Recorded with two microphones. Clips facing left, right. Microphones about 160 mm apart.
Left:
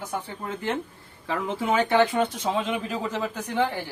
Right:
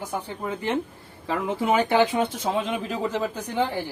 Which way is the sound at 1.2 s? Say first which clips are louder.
Right 2 dB; 15° right (ahead or behind).